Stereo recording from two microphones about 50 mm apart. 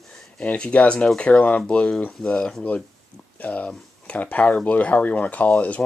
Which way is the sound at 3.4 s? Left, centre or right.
Left.